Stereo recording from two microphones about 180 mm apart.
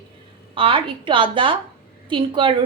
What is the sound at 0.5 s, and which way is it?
A woman's voice, 30° right (ahead or behind).